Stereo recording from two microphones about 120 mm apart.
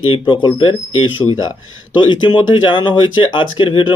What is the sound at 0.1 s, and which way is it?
Speech, 45° left (ahead or behind).